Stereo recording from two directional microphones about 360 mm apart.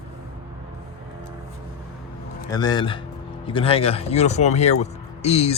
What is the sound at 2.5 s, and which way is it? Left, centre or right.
Speech, centre.